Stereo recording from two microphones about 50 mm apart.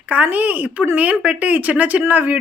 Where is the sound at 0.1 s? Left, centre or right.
Right.